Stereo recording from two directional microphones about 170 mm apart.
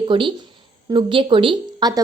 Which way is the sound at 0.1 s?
30° right (ahead or behind).